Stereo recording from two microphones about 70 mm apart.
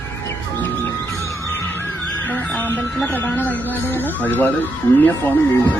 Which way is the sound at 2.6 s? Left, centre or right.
Left.